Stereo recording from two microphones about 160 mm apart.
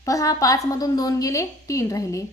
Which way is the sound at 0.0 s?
20° left (ahead or behind).